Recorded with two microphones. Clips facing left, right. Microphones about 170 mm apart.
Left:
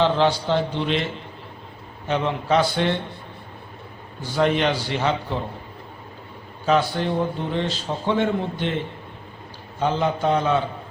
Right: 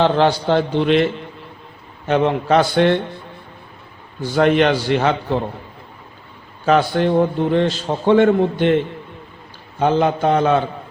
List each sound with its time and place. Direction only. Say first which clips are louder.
0.0 s a man's voice: right 4 dB; 60° right (ahead or behind)
2.0 s a man's voice: right 6 dB; 60° right (ahead or behind)
4.4 s a man's voice: right 6 dB; 65° right (ahead or behind)
6.7 s a man's voice: right 5 dB; 60° right (ahead or behind)
9.8 s a man's voice: right 5 dB; 60° right (ahead or behind)